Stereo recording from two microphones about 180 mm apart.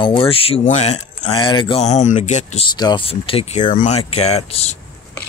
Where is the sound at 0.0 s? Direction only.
30° left (ahead or behind).